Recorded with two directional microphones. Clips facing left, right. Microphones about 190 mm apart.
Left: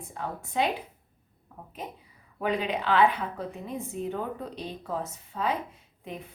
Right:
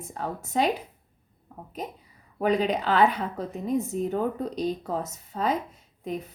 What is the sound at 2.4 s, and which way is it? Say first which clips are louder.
A woman's voice: right 5 dB; 40° right (ahead or behind).